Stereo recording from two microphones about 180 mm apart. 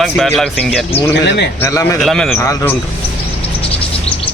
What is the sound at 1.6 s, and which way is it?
Speech, 15° left (ahead or behind).